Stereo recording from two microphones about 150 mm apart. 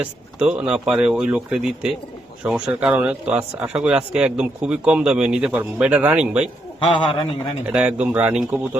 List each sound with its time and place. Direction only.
0.0 s speech: 5° right (ahead or behind)
6.7 s a man's voice: 35° left (ahead or behind)
7.6 s speech: 5° right (ahead or behind)